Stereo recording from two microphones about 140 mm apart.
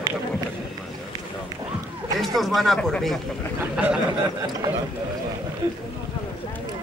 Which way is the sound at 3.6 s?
10° right (ahead or behind).